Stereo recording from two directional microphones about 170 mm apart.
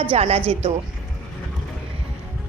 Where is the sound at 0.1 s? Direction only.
35° right (ahead or behind).